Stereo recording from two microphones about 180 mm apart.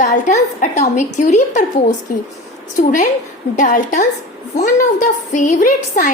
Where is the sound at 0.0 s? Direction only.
40° left (ahead or behind).